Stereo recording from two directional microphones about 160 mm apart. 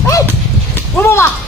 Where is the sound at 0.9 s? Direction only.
15° left (ahead or behind).